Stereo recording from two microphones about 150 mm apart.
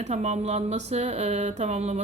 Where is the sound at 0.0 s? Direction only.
50° right (ahead or behind).